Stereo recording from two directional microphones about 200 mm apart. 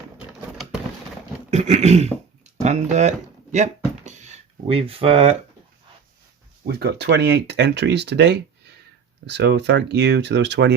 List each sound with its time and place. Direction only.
1.5 s speech: 35° right (ahead or behind)
4.0 s a sound: 35° right (ahead or behind)
6.7 s speech: 55° right (ahead or behind)